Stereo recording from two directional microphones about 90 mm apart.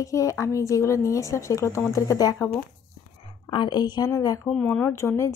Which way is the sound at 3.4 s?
55° left (ahead or behind).